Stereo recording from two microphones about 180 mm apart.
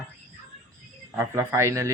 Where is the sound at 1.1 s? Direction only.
15° right (ahead or behind).